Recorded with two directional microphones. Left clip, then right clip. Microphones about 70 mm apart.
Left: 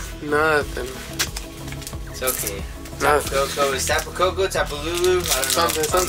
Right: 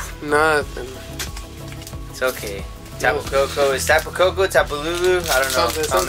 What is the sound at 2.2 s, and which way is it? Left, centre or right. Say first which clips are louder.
Speech: right 4 dB; right.